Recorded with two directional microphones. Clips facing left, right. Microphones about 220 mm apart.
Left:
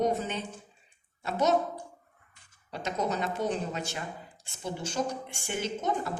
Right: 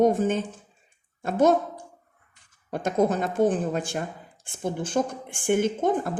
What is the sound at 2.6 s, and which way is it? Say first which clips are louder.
A woman's voice: right 9 dB; 50° right (ahead or behind).